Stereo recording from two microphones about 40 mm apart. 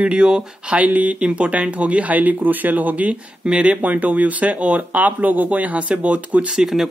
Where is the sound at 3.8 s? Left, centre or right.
Right.